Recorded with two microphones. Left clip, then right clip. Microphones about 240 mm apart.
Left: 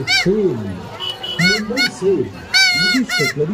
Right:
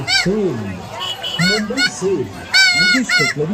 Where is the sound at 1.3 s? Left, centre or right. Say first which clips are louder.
Left 1 dB; centre.